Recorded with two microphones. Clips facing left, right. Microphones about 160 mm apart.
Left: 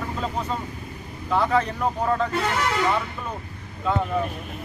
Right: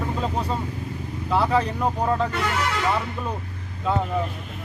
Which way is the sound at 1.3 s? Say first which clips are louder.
Even; 5° right (ahead or behind).